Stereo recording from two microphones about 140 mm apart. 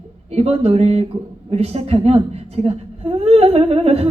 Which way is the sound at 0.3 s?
45° right (ahead or behind).